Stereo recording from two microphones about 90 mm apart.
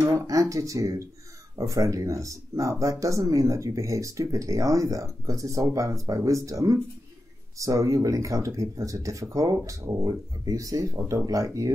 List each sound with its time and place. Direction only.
0.1 s speech: 40° right (ahead or behind)